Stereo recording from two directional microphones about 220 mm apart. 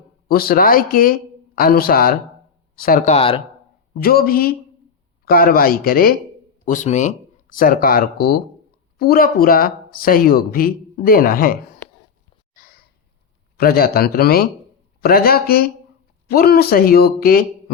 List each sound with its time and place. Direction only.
0.3 s speech: 45° left (ahead or behind); by 3.4 s 25° left (ahead or behind)
4.0 s speech: 45° left (ahead or behind)
12.5 s a sound: 40° left (ahead or behind)
13.6 s speech: 45° left (ahead or behind)